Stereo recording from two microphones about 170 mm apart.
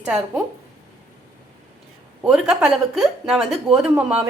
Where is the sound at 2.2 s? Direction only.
5° right (ahead or behind).